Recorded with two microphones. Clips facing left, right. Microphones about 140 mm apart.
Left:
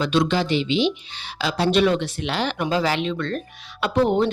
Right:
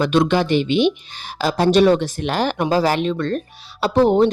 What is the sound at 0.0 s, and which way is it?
Speech, 55° right (ahead or behind).